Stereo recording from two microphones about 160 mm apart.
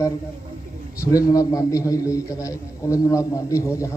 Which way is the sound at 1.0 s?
20° left (ahead or behind).